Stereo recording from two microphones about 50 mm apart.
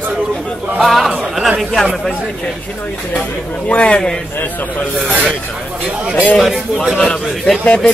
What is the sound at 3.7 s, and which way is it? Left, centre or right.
Speech, centre.